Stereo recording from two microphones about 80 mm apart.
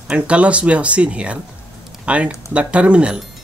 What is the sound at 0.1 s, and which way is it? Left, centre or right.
Speech, centre.